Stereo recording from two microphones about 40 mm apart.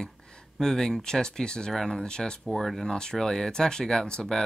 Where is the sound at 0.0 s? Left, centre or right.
Centre.